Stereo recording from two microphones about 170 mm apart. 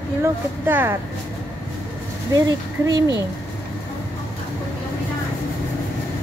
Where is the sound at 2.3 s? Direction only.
20° right (ahead or behind).